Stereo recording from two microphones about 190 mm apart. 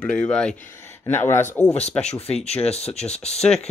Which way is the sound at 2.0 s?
35° left (ahead or behind).